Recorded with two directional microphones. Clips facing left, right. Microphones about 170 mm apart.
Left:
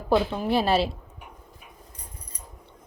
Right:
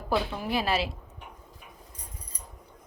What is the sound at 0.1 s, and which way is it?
Speech, 25° left (ahead or behind).